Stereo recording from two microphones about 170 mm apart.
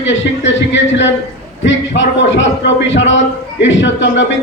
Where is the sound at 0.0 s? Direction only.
90° left.